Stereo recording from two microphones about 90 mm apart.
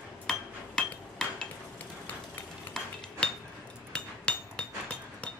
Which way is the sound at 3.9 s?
10° left (ahead or behind).